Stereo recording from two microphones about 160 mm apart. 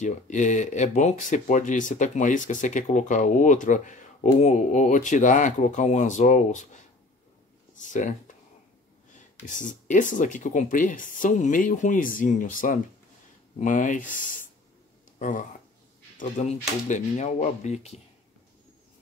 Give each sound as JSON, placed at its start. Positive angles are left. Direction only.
{"t": 0.0, "sound": "speech", "side_deg": 50}
{"t": 7.8, "sound": "speech", "side_deg": 55}
{"t": 9.1, "sound": "speech", "side_deg": 50}